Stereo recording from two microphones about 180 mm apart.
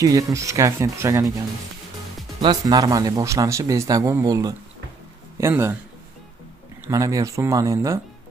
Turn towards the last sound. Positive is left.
turn(degrees=-20)  # may be behind; listen again after turning